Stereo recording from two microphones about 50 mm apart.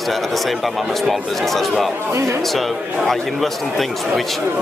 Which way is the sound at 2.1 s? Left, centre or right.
Right.